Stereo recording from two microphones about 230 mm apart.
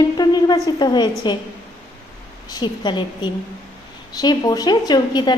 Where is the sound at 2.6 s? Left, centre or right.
Centre.